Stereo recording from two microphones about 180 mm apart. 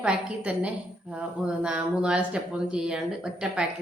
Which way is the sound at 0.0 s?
5° right (ahead or behind).